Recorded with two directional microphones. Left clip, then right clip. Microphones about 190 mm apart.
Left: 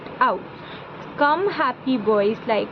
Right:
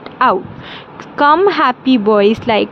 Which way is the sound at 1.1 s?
55° right (ahead or behind).